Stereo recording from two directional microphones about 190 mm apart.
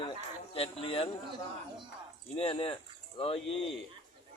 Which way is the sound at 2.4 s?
30° left (ahead or behind).